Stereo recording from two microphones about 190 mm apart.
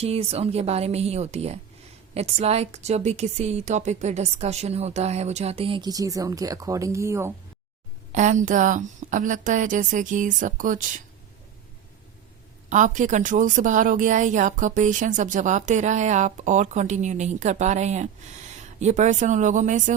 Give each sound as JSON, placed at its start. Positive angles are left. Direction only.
{"t": 0.0, "sound": "a woman's voice", "side_deg": -30}
{"t": 8.1, "sound": "a woman's voice", "side_deg": -40}
{"t": 12.6, "sound": "a woman's voice", "side_deg": -40}